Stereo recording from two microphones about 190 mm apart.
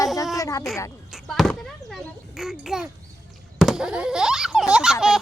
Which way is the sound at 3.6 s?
Centre (ahead or behind).